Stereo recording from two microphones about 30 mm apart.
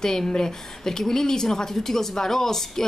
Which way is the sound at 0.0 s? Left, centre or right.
Centre.